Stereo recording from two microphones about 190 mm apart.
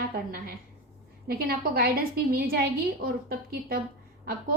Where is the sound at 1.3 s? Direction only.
55° right (ahead or behind).